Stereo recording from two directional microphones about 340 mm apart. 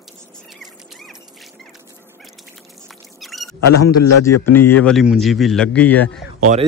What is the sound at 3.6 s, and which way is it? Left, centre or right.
Speech, left.